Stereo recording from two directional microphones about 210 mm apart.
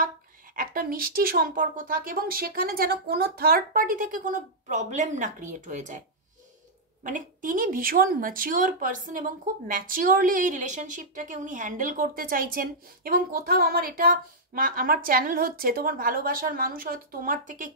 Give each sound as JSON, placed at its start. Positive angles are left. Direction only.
{"t": 0.6, "sound": "speech", "side_deg": -45}